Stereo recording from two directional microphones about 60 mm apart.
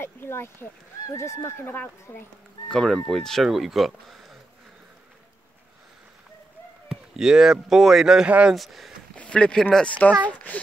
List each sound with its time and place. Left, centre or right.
0.0 s speech: left
1.1 s speech: left
2.7 s speech: centre
6.9 s a sound: centre
7.7 s speech: centre
8.3 s speech: right
8.5 s speech: centre
9.1 s a child's voice: centre